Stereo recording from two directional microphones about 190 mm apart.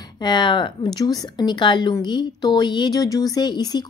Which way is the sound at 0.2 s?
25° left (ahead or behind).